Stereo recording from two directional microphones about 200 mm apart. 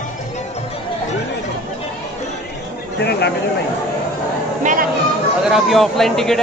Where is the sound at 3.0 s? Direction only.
55° left (ahead or behind).